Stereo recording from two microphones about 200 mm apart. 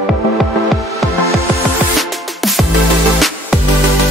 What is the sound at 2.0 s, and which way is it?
Music, centre (ahead or behind).